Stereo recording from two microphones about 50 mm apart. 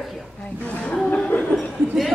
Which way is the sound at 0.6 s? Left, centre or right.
Left.